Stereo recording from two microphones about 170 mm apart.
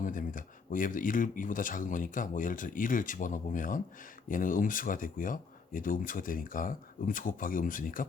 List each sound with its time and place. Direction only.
0.0 s speech: 50° left (ahead or behind)